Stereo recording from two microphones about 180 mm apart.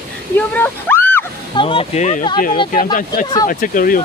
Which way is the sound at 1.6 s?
30° left (ahead or behind).